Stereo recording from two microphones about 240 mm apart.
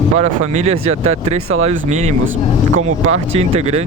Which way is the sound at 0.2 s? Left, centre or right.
Right.